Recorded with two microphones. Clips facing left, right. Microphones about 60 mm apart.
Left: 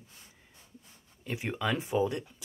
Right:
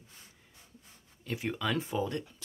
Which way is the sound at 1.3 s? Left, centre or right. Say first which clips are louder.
Left 1 dB; left.